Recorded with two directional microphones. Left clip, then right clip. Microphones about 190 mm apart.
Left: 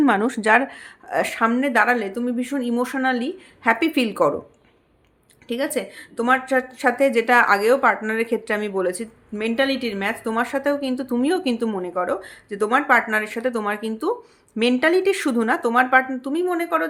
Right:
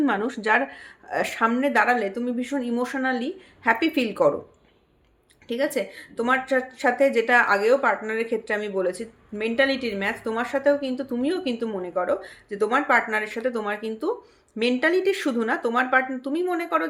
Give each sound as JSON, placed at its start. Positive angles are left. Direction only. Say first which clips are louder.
{"t": 0.0, "sound": "speech", "louder": "left 5 dB", "side_deg": 35}
{"t": 5.5, "sound": "speech", "louder": "left 1 dB", "side_deg": 20}